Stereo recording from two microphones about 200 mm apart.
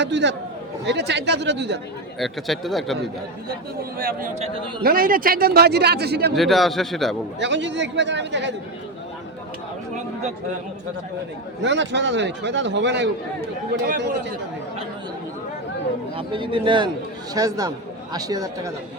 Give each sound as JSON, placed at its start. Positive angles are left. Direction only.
{"t": 0.0, "sound": "a man's voice", "side_deg": -60}
{"t": 2.1, "sound": "a man's voice", "side_deg": 0}
{"t": 3.9, "sound": "a man's voice", "side_deg": -45}
{"t": 6.3, "sound": "a man's voice", "side_deg": 0}
{"t": 7.3, "sound": "a man's voice", "side_deg": -65}
{"t": 11.6, "sound": "a man's voice", "side_deg": -65}
{"t": 16.1, "sound": "a man's voice", "side_deg": -25}